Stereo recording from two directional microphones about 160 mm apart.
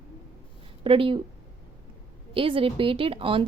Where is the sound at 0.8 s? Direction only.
35° right (ahead or behind).